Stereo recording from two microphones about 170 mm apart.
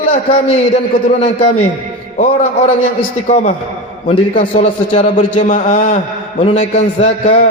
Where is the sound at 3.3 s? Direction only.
45° left (ahead or behind).